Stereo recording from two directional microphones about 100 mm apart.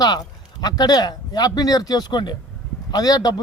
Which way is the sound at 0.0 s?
40° left (ahead or behind).